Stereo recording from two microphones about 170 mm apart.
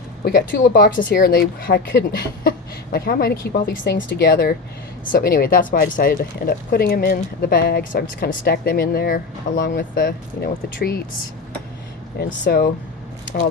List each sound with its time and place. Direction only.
0.3 s speech: 55° left (ahead or behind)
3.9 s speech: 75° left (ahead or behind)
5.1 s speech: 60° left (ahead or behind)
12.5 s speech: 70° left (ahead or behind)